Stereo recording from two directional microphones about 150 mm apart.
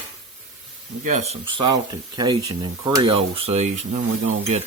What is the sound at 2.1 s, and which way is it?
Speech, 30° right (ahead or behind).